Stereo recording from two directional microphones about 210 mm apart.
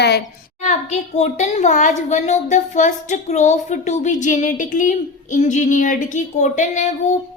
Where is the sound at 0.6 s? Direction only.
35° left (ahead or behind).